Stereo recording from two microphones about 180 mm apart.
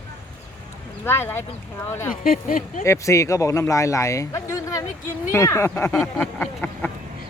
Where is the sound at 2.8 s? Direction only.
15° left (ahead or behind).